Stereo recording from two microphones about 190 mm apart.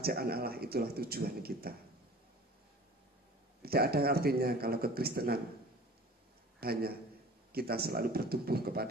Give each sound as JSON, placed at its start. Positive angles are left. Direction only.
{"t": 0.0, "sound": "speech", "side_deg": -55}
{"t": 3.6, "sound": "speech", "side_deg": -55}
{"t": 6.6, "sound": "speech", "side_deg": -55}